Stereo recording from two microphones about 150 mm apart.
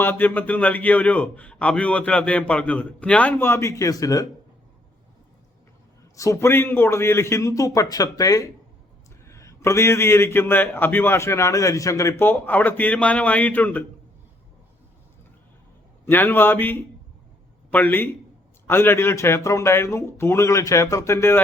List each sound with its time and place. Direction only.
0.0 s a man's voice: 15° left (ahead or behind)
6.1 s a man's voice: 20° left (ahead or behind)
16.0 s a man's voice: 15° left (ahead or behind)